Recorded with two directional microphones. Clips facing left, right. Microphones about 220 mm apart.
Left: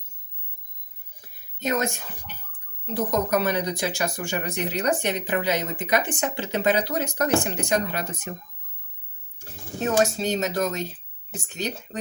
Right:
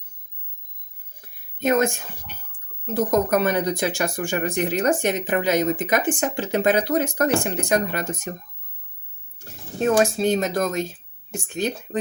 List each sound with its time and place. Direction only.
1.5 s speech: 55° right (ahead or behind)
9.4 s speech: 50° right (ahead or behind)